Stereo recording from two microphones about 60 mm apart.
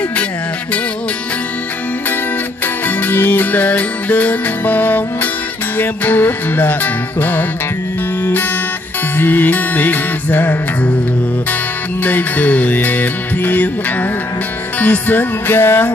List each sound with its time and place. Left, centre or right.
2.6 s music: left
12.0 s music: left